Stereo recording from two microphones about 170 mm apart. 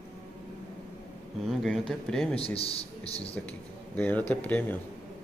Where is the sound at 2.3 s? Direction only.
35° left (ahead or behind).